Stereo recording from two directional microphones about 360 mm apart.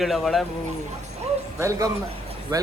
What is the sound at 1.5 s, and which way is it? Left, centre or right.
Speech, centre.